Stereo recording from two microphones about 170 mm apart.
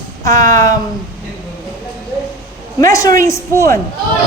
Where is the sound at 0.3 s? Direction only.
20° left (ahead or behind).